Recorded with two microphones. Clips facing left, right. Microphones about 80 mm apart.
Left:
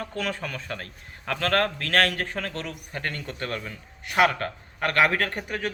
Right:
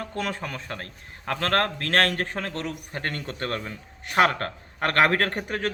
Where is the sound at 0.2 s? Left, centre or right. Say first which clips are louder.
Right 1 dB; right.